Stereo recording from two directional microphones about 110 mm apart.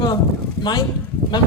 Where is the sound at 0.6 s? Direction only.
40° left (ahead or behind).